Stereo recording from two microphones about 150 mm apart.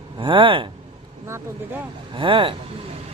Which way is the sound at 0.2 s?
35° right (ahead or behind).